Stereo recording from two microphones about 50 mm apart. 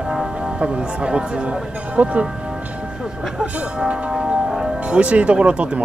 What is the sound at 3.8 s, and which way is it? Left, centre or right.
Tubular bells, centre.